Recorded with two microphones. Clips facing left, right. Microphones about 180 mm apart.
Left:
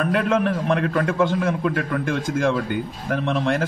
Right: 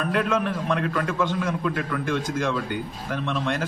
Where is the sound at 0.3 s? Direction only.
30° left (ahead or behind).